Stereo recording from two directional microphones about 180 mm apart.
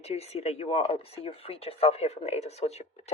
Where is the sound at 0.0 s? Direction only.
35° left (ahead or behind).